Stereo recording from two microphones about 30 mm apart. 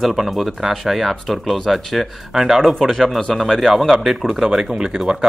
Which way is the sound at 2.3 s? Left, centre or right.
Centre.